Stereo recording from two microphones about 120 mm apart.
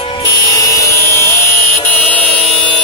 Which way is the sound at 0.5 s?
25° left (ahead or behind).